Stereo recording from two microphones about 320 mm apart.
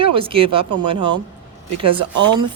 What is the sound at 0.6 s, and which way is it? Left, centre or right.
Speech, right.